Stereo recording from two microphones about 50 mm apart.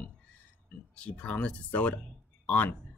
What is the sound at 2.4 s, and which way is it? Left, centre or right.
Speech, left.